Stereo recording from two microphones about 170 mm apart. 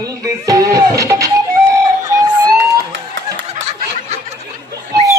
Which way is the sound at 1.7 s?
15° right (ahead or behind).